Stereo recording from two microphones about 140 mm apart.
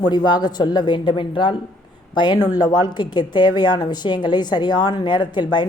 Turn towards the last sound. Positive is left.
turn(degrees=35)  # may be behind; listen again after turning